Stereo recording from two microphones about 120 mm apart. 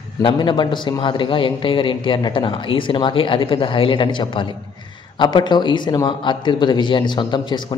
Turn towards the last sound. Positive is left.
turn(degrees=40)  # may be behind; listen again after turning